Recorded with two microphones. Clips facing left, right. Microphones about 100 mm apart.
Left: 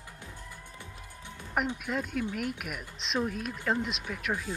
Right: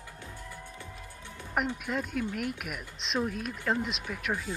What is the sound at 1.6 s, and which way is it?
Speech, centre (ahead or behind).